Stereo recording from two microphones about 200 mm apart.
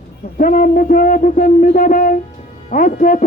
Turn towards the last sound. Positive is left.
turn(degrees=45)  # may be behind; listen again after turning